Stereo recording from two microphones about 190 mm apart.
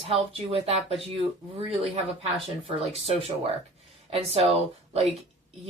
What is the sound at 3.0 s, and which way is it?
Speech, 30° right (ahead or behind).